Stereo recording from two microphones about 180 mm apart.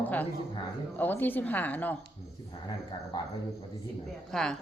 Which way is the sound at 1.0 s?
10° left (ahead or behind).